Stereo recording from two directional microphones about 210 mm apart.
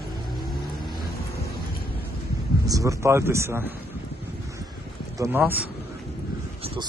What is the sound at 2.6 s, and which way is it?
Speech, 15° right (ahead or behind).